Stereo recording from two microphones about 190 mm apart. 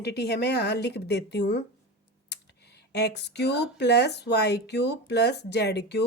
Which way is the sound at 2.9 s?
60° left (ahead or behind).